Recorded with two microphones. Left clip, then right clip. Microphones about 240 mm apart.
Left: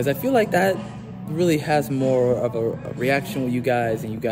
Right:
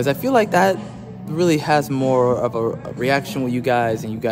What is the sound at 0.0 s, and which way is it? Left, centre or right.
Speech, centre.